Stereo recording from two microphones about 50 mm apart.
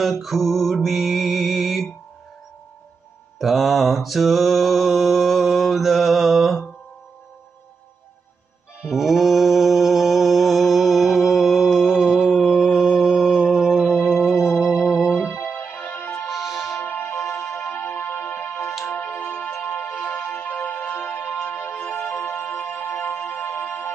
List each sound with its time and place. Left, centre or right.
0.0 s music: centre
3.3 s mantra: centre
8.8 s mantra: centre
14.8 s music: centre
15.7 s music: left
16.0 s music: left
16.3 s music: centre
16.8 s music: left
20.1 s music: centre
20.3 s music: left
21.5 s music: left